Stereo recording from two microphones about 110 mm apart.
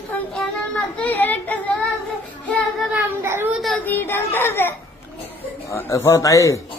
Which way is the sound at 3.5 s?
Centre (ahead or behind).